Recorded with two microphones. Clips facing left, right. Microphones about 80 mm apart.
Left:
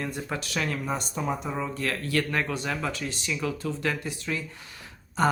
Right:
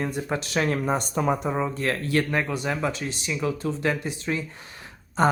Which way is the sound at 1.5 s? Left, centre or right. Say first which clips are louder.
Right 4 dB; right.